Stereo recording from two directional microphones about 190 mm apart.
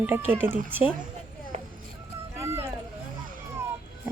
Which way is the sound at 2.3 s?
15° right (ahead or behind).